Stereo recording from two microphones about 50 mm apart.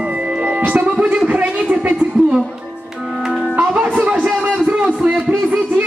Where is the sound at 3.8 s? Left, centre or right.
Right.